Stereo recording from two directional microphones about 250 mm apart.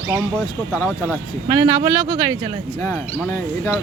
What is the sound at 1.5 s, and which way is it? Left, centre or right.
Speech, centre.